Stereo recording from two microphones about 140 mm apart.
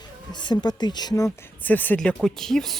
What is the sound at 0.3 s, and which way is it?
Speech, 30° left (ahead or behind).